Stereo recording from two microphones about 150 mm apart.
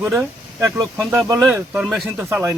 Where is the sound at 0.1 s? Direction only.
20° right (ahead or behind).